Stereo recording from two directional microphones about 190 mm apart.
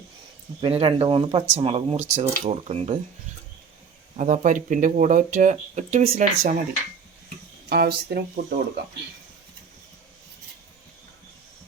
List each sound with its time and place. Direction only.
0.6 s speech: 30° right (ahead or behind)
4.2 s speech: 45° right (ahead or behind)
7.7 s speech: 60° right (ahead or behind)